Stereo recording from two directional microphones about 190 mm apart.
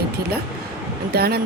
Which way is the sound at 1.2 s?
55° right (ahead or behind).